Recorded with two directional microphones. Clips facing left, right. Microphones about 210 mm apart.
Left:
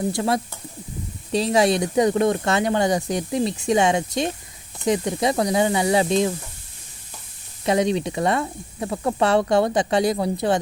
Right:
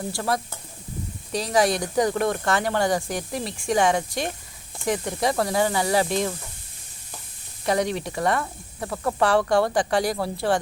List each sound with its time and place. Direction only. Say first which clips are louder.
0.1 s speech: left 4 dB; 20° left (ahead or behind)
7.6 s speech: left 4 dB; 20° left (ahead or behind)